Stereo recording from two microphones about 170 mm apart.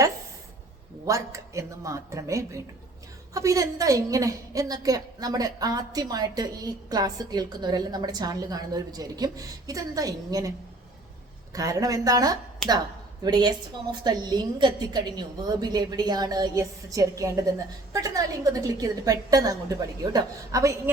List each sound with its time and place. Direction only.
1.0 s a woman's voice: 20° right (ahead or behind)
11.5 s a woman's voice: 20° right (ahead or behind)